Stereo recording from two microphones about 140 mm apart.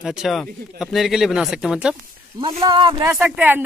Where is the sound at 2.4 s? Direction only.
40° right (ahead or behind).